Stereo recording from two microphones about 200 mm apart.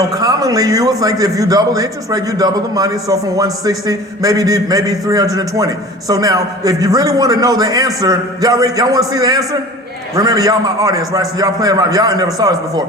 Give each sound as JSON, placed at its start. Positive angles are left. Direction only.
{"t": 0.1, "sound": "a man's voice", "side_deg": -20}